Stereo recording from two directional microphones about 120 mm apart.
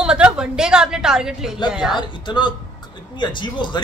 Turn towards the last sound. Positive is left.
turn(degrees=40)  # may be behind; listen again after turning